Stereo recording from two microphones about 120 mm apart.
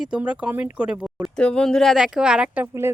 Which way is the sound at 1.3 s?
5° left (ahead or behind).